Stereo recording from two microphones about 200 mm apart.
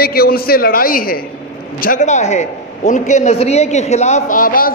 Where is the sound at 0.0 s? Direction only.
50° left (ahead or behind).